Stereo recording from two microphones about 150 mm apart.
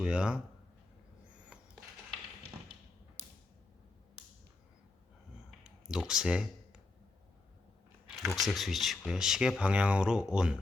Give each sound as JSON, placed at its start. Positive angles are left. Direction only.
{"t": 0.0, "sound": "speech", "side_deg": -5}
{"t": 5.6, "sound": "a sound", "side_deg": -5}
{"t": 8.2, "sound": "speech", "side_deg": 0}